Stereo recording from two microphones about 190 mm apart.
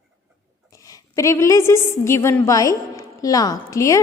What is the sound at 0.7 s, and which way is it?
A woman's voice, 20° left (ahead or behind).